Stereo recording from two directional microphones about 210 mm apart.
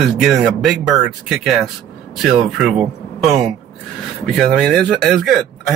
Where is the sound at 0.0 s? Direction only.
Centre (ahead or behind).